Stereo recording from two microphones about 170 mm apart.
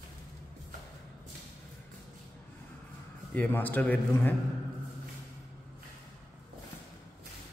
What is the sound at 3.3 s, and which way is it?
A man's voice, 10° left (ahead or behind).